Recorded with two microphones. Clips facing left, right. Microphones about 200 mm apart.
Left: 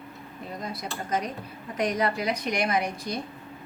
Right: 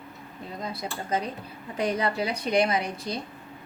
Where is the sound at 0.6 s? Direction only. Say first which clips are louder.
Right 2 dB; 25° right (ahead or behind).